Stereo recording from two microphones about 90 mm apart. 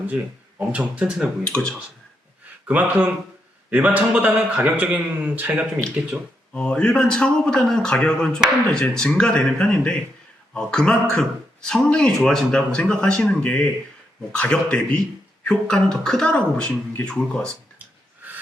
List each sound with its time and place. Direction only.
0.7 s a man's voice: 15° right (ahead or behind)
1.5 s a man's voice: 10° left (ahead or behind)
2.6 s a man's voice: 20° right (ahead or behind)
6.5 s a man's voice: 15° left (ahead or behind)